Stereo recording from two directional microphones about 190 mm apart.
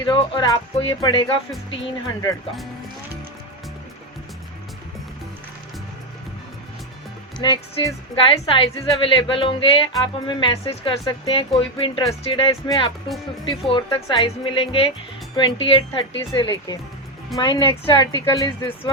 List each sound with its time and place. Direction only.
0.1 s speech: 25° left (ahead or behind)
7.4 s speech: 20° left (ahead or behind)